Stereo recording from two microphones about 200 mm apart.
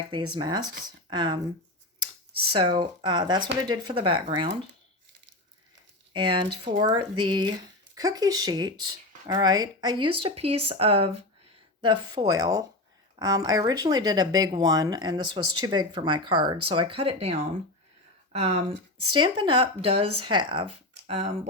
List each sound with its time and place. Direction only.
0.1 s speech: 25° right (ahead or behind)
2.5 s speech: 25° right (ahead or behind)
6.1 s speech: 25° right (ahead or behind)